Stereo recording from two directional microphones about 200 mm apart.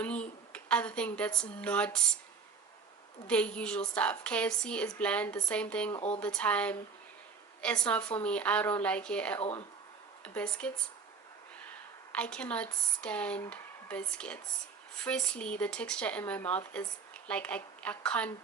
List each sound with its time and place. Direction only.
0.0 s speech: 5° left (ahead or behind)
3.2 s a woman's voice: 5° left (ahead or behind)
5.9 s speech: 30° left (ahead or behind)
6.1 s speech: 5° left (ahead or behind)
9.4 s speech: 30° left (ahead or behind)
10.2 s a woman's voice: 5° left (ahead or behind)
12.1 s a woman's voice: 5° left (ahead or behind)